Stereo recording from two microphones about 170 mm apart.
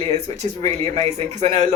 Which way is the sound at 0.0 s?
40° right (ahead or behind).